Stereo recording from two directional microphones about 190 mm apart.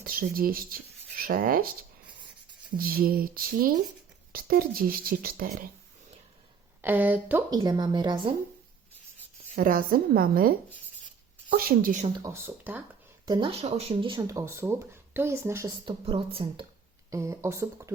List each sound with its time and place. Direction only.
0.0 s speech: 50° right (ahead or behind)
2.7 s speech: 50° right (ahead or behind)
6.8 s speech: 10° right (ahead or behind)
7.5 s speech: 20° right (ahead or behind)
9.6 s speech: 50° right (ahead or behind)
11.5 s speech: 45° right (ahead or behind)
12.2 s speech: 10° right (ahead or behind)
13.2 s speech: 25° right (ahead or behind)
15.9 s speech: 30° right (ahead or behind)
17.1 s speech: 15° right (ahead or behind)